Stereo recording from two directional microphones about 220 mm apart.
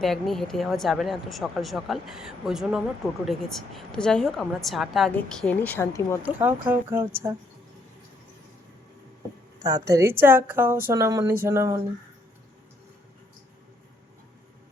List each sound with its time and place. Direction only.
0.0 s a woman's voice: centre (ahead or behind)
6.2 s a woman's voice: 10° right (ahead or behind)
9.6 s a woman's voice: 15° right (ahead or behind)